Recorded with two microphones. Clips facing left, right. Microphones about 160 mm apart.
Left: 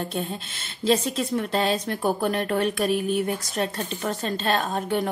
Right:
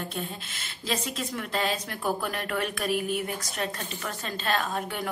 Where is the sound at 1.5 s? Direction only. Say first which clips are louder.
Left 6 dB; 30° left (ahead or behind).